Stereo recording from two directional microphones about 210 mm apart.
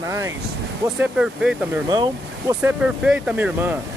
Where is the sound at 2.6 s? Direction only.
5° right (ahead or behind).